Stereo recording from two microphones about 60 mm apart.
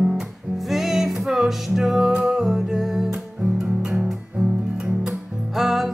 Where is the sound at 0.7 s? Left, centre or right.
Centre.